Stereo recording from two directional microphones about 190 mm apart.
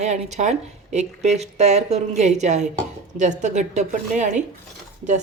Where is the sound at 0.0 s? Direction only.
35° right (ahead or behind).